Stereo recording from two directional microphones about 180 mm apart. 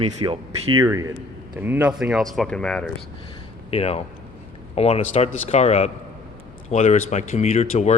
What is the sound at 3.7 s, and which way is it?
Speech, 35° left (ahead or behind).